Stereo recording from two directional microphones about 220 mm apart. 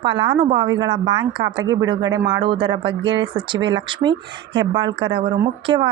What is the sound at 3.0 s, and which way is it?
Speech, 55° right (ahead or behind).